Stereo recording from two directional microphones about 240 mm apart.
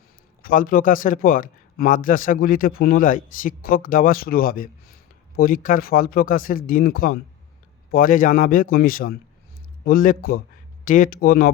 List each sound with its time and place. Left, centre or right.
0.4 s a man's voice: left